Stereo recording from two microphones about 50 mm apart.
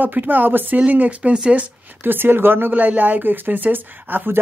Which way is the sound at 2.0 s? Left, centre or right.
Right.